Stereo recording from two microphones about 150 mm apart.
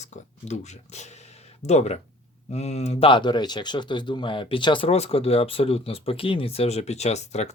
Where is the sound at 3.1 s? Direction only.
30° left (ahead or behind).